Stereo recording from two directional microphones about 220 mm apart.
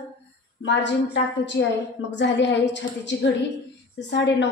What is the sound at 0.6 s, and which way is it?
A woman's voice, 55° left (ahead or behind).